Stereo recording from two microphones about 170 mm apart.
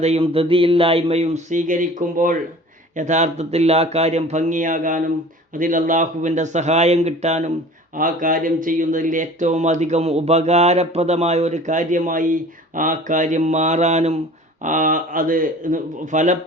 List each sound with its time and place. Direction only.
0.0 s a sound: 35° right (ahead or behind)
2.9 s speech: 45° right (ahead or behind)
7.9 s speech: 55° right (ahead or behind)